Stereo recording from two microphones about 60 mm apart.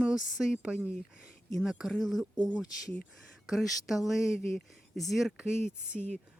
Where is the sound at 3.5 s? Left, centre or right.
Centre.